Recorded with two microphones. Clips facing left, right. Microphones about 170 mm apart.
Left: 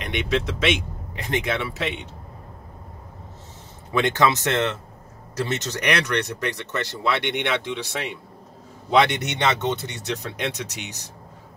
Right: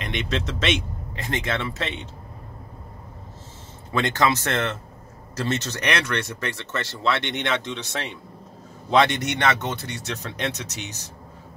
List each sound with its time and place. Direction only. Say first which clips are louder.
0.0 s speech: left 3 dB; 10° left (ahead or behind)
3.9 s speech: left 2 dB; 15° left (ahead or behind)